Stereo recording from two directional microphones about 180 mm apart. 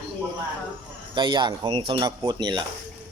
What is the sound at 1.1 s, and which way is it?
Speech, 25° right (ahead or behind).